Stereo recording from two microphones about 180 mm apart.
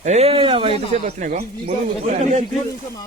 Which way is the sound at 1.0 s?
50° right (ahead or behind).